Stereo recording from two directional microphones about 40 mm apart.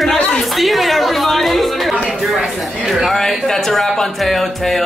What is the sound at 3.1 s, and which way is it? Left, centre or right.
Speech, centre.